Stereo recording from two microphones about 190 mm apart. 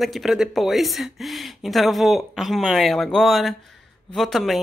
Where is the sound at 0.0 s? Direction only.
Centre (ahead or behind).